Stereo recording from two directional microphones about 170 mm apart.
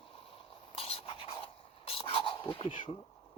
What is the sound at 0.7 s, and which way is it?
Scratch, 35° left (ahead or behind).